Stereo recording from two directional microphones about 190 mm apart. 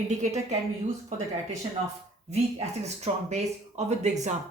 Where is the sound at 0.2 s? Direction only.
35° right (ahead or behind).